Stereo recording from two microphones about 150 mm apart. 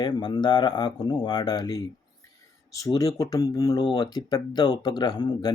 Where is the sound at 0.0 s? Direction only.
30° left (ahead or behind).